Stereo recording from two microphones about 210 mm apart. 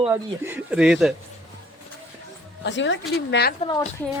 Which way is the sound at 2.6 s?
60° left (ahead or behind).